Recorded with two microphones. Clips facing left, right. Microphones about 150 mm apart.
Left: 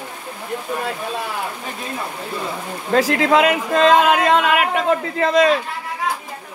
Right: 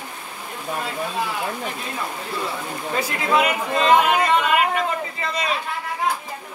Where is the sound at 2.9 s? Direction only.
90° left.